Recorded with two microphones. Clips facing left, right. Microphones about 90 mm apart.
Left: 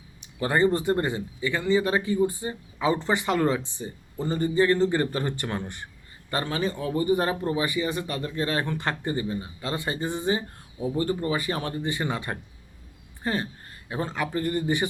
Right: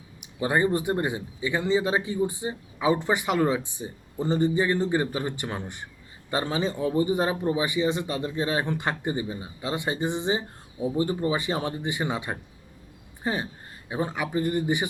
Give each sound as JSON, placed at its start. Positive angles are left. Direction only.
{"t": 0.2, "sound": "a man's voice", "side_deg": -15}